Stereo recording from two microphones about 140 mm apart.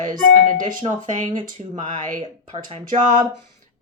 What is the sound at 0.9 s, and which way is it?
Speech, 60° right (ahead or behind).